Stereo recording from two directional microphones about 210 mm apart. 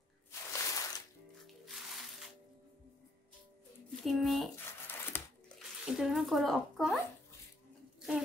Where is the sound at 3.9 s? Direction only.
Centre (ahead or behind).